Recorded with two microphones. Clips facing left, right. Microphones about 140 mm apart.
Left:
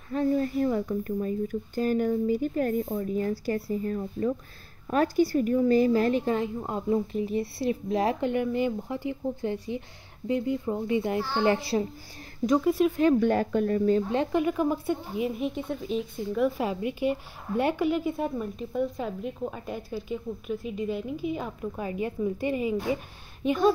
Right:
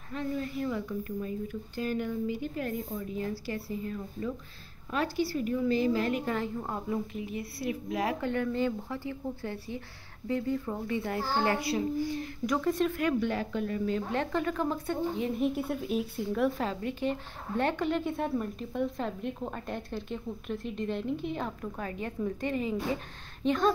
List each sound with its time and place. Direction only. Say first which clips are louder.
0.1 s speech: left 8 dB; 40° left (ahead or behind)
6.1 s a woman's voice: left 5 dB; 20° left (ahead or behind)
7.1 s a woman's voice: left 8 dB; 35° left (ahead or behind)
8.3 s speech: left 3 dB; 15° left (ahead or behind)
11.4 s a child's voice: left 4 dB; 30° left (ahead or behind)
12.6 s speech: left 2 dB; 10° left (ahead or behind)
13.2 s speech: left 7 dB; 45° left (ahead or behind)
14.1 s speech: left 5 dB; 15° left (ahead or behind); by 16.6 s centre (ahead or behind)
16.6 s speech: left 4 dB; 10° left (ahead or behind)